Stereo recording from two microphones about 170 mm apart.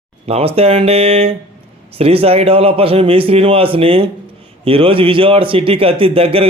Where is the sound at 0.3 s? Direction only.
35° right (ahead or behind).